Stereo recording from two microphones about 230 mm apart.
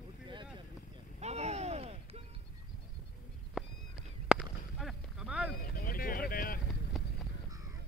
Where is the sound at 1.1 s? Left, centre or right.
Right.